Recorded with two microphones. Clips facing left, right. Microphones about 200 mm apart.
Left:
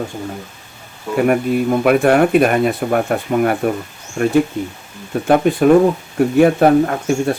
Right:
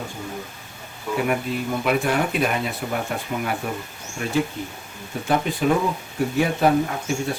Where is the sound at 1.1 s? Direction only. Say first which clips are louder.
Left 9 dB; 55° left (ahead or behind).